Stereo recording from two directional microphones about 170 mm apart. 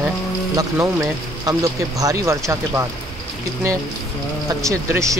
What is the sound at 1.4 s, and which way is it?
Speech, 20° right (ahead or behind).